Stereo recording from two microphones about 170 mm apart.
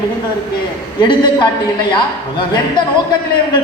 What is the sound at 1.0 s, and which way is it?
A man's voice, 25° left (ahead or behind).